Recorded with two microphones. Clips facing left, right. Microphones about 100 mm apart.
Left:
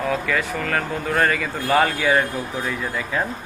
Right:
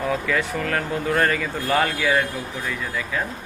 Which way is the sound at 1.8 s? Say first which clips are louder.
Left 2 dB; 25° left (ahead or behind).